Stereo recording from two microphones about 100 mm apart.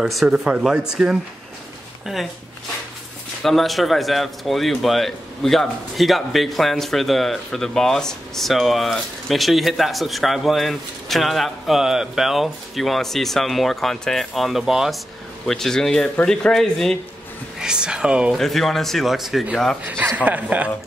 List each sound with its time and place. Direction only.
0.0 s speech: 5° right (ahead or behind)
3.4 s speech: centre (ahead or behind)
17.6 s speech: 10° right (ahead or behind)
18.4 s speech: centre (ahead or behind)
19.8 s a man's voice: 20° right (ahead or behind)